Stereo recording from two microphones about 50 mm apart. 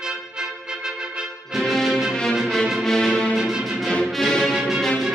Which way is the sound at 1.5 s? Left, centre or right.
Centre.